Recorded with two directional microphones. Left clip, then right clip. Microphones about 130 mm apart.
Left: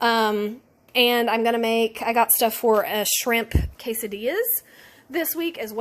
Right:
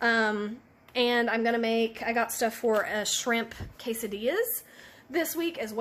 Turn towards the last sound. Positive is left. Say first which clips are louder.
# left 4 dB
turn(degrees=45)  # may be behind; listen again after turning